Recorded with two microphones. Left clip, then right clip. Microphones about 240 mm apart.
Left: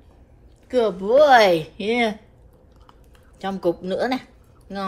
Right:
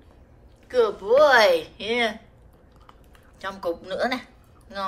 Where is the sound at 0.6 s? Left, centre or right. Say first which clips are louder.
Left 1 dB; centre.